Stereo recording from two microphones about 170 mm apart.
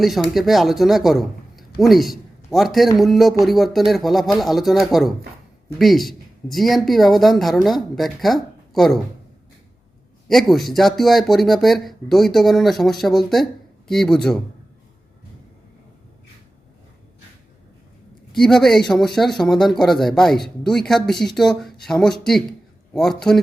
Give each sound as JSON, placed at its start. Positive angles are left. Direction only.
{"t": 0.0, "sound": "a man's voice", "side_deg": 0}
{"t": 10.2, "sound": "speech", "side_deg": 0}
{"t": 18.3, "sound": "speech", "side_deg": 5}